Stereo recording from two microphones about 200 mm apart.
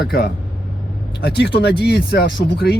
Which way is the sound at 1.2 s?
55° left (ahead or behind).